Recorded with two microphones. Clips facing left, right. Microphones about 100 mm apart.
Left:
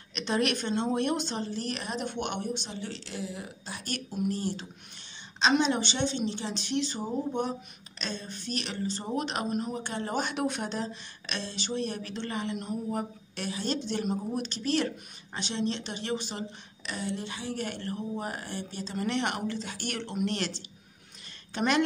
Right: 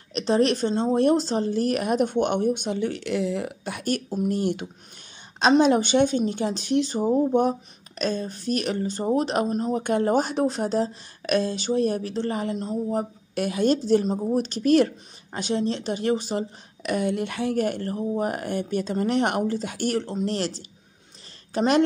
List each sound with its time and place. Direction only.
0.1 s speech: 35° right (ahead or behind)
4.4 s speech: 60° right (ahead or behind)
5.5 s speech: 45° right (ahead or behind)
9.8 s speech: 45° right (ahead or behind)
13.3 s speech: 50° right (ahead or behind)
18.9 s speech: 45° right (ahead or behind)